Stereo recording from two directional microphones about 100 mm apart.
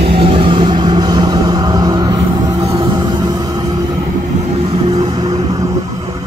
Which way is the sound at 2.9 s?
45° right (ahead or behind).